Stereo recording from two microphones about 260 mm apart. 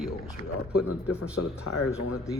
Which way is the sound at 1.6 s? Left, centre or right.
Left.